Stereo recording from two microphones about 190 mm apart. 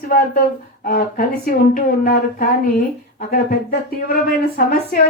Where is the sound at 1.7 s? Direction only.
50° left (ahead or behind).